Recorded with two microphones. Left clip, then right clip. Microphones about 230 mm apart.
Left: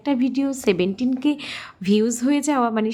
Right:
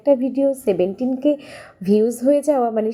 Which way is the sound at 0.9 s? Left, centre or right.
Left.